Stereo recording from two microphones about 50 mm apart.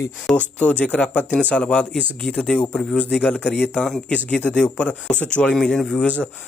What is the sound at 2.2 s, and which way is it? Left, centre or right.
Speech, centre.